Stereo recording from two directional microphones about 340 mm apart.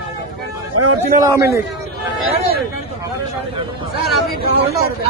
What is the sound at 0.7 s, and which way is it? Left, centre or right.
Speech, right.